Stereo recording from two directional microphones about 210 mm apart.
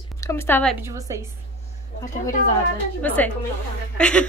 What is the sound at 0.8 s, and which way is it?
Speech, 15° right (ahead or behind).